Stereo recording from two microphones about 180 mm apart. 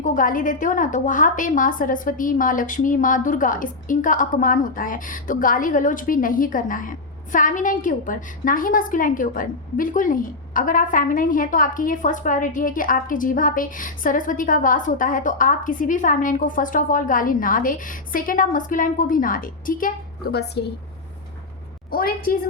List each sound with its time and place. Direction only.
0.0 s a woman's voice: 45° left (ahead or behind)
20.3 s a woman's voice: 65° left (ahead or behind)
21.9 s a woman's voice: 55° left (ahead or behind)